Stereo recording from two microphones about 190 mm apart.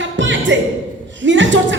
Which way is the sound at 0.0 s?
75° right (ahead or behind).